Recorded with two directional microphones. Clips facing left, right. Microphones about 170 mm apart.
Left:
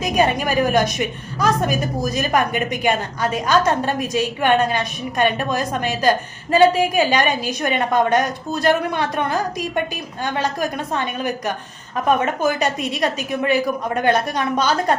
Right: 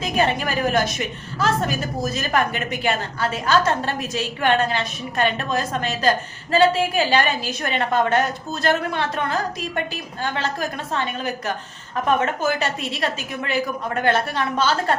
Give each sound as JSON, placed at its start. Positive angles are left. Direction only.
{"t": 0.0, "sound": "a woman's voice", "side_deg": 15}